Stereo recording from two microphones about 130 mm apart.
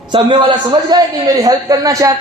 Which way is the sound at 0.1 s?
35° right (ahead or behind).